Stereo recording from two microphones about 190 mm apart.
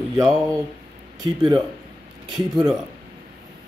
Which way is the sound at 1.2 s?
20° right (ahead or behind).